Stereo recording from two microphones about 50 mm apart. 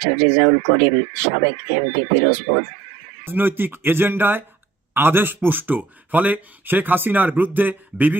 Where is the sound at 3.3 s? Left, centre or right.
Right.